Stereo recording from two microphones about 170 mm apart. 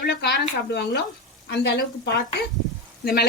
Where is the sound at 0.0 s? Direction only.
70° left (ahead or behind).